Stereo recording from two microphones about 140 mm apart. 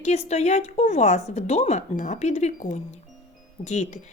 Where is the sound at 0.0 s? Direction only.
55° left (ahead or behind).